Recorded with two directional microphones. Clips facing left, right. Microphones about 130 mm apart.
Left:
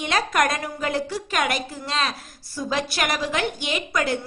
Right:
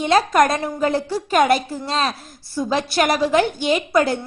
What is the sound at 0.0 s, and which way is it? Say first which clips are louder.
A woman's voice: right 7 dB; 35° right (ahead or behind).